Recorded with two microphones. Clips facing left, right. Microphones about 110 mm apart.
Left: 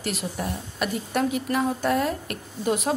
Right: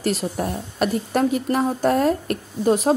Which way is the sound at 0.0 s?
40° right (ahead or behind).